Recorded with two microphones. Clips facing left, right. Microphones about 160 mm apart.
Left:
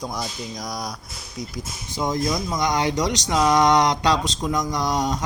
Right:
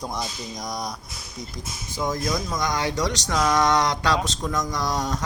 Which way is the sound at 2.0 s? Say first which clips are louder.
Left 2 dB; 20° left (ahead or behind).